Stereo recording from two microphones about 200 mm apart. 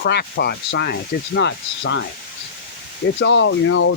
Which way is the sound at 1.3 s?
65° left (ahead or behind).